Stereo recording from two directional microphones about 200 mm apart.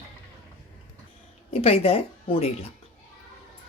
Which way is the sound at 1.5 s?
30° left (ahead or behind).